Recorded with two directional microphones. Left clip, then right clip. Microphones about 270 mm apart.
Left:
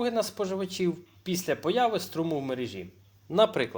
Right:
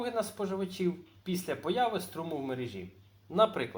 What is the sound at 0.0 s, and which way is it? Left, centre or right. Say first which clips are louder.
Speech: left 5 dB; left.